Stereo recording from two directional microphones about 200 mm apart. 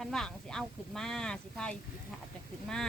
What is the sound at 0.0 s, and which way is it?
Speech, centre (ahead or behind).